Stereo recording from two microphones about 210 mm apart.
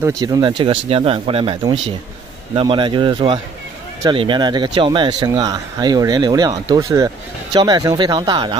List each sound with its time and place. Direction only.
0.2 s speech: 20° right (ahead or behind)